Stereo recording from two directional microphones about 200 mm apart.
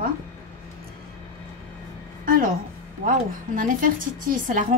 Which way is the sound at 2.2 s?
45° right (ahead or behind).